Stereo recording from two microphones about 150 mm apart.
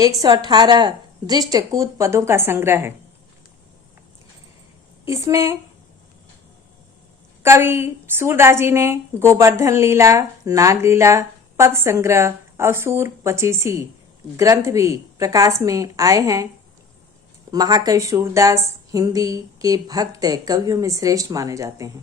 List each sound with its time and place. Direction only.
0.2 s a woman's voice: 25° right (ahead or behind)
5.0 s a woman's voice: 20° right (ahead or behind)
7.4 s a woman's voice: 15° right (ahead or behind)
17.5 s a woman's voice: 25° right (ahead or behind)